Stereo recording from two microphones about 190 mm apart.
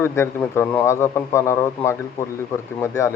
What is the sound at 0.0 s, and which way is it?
A man's voice, 15° left (ahead or behind).